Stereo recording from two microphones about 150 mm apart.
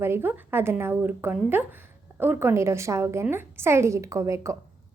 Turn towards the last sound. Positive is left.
turn(degrees=-20)  # may be behind; listen again after turning